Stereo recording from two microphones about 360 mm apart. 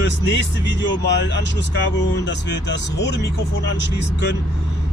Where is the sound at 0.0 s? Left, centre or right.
Left.